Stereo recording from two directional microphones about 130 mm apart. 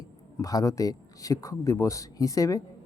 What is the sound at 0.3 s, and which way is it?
Speech, 25° left (ahead or behind).